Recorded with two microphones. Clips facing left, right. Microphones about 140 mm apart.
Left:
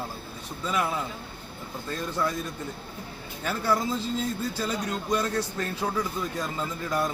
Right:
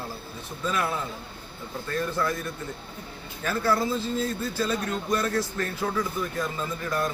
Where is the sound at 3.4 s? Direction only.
15° left (ahead or behind).